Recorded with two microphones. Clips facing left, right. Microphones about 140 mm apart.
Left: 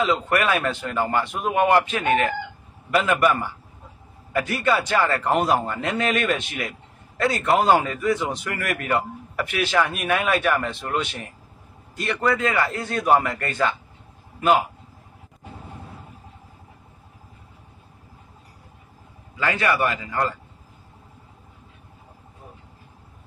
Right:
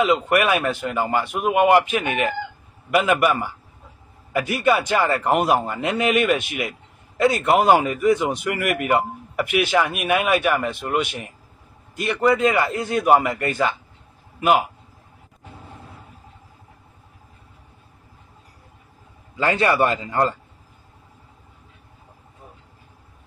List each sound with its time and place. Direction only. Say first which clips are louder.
0.0 s a man's voice: right 3 dB; 15° right (ahead or behind)
19.3 s a man's voice: right 3 dB; 30° right (ahead or behind)